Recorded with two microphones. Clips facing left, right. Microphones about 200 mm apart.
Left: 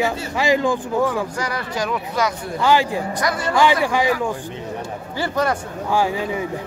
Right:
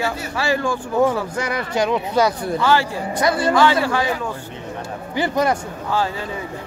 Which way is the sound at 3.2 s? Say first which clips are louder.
Right 8 dB; 30° right (ahead or behind).